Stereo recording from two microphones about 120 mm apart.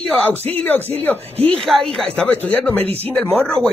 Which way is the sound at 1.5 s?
Centre (ahead or behind).